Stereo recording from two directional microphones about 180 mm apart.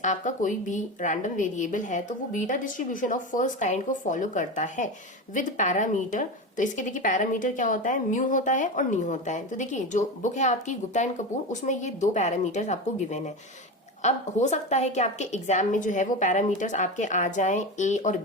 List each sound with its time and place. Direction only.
0.0 s a woman's voice: 45° left (ahead or behind)